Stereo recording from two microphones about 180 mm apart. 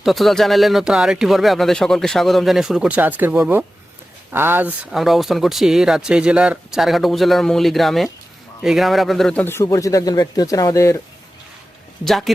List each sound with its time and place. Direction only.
0.0 s a man's voice: centre (ahead or behind); by 11.0 s 15° left (ahead or behind)
12.0 s speech: centre (ahead or behind)